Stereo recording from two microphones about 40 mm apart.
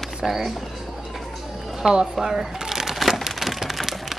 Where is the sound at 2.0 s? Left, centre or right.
Centre.